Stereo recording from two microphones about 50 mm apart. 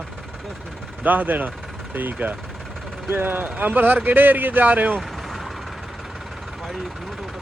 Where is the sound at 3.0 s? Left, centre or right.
Right.